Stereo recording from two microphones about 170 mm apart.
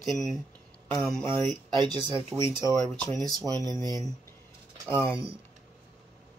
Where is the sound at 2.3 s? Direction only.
15° right (ahead or behind).